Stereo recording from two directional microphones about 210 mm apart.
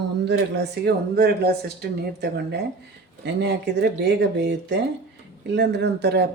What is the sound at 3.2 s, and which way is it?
Speech, 55° right (ahead or behind).